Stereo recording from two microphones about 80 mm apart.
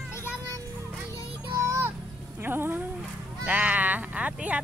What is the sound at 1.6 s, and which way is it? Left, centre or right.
Music, right.